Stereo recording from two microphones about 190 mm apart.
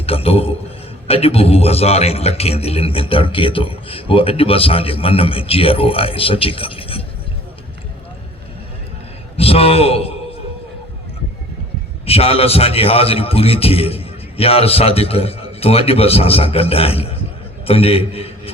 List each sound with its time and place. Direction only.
0.0 s a man's voice: 30° left (ahead or behind)
9.4 s a man's voice: 30° left (ahead or behind)
12.0 s a man's voice: 30° left (ahead or behind)